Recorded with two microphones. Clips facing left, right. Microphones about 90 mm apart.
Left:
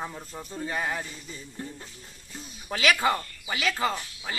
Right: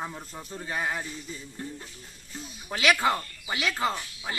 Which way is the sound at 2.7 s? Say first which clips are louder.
Even; centre (ahead or behind).